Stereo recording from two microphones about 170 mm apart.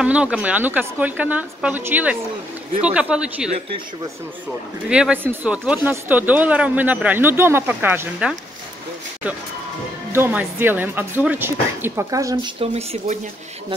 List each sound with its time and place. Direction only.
0.0 s speech: 5° right (ahead or behind)
4.8 s speech: 5° right (ahead or behind)
10.1 s speech: 10° right (ahead or behind)
12.5 s speech: 40° right (ahead or behind)